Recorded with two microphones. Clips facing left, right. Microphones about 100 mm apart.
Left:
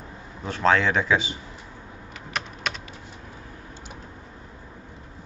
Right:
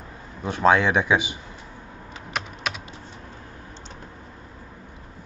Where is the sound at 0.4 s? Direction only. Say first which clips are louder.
Right 2 dB; 15° right (ahead or behind).